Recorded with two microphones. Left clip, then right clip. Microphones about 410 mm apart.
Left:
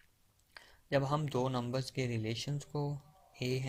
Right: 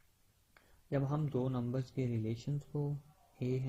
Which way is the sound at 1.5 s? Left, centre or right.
Left.